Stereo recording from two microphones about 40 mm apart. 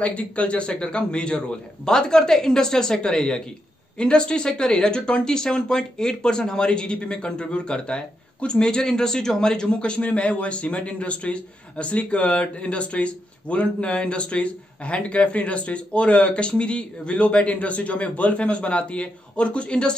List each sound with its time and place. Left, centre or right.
0.0 s speech: left
1.9 s a man's voice: centre